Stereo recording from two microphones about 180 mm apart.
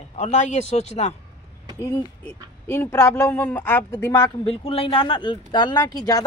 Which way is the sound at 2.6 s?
15° left (ahead or behind).